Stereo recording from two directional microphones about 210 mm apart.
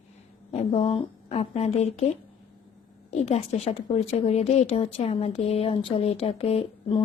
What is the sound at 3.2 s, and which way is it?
Speech, 30° left (ahead or behind).